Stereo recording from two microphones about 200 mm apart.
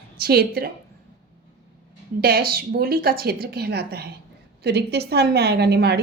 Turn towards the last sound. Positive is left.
turn(degrees=-55)  # may be behind; listen again after turning